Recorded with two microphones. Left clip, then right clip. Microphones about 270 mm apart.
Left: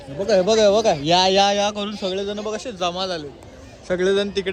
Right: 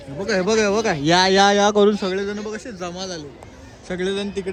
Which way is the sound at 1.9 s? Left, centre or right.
Centre.